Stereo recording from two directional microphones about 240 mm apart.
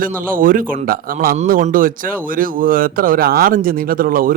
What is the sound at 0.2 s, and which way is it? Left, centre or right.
Speech, right.